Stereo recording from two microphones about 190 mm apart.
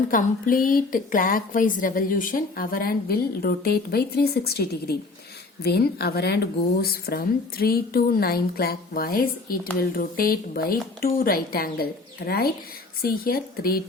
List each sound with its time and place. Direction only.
0.1 s a woman's voice: 45° left (ahead or behind)